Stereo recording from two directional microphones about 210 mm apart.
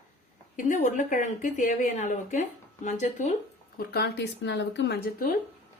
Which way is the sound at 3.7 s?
50° left (ahead or behind).